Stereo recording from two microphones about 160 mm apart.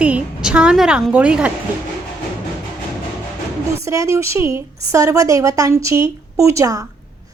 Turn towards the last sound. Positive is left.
turn(degrees=-20)  # may be behind; listen again after turning